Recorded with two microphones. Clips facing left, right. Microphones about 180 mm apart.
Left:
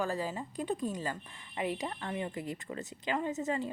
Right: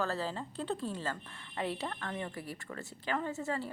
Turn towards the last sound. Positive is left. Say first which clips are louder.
# left 3 dB
turn(degrees=20)  # may be behind; listen again after turning